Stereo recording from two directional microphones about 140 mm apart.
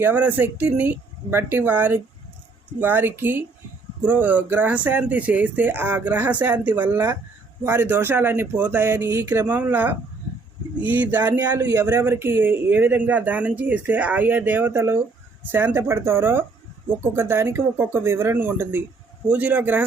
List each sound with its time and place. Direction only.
0.0 s speech: 10° right (ahead or behind)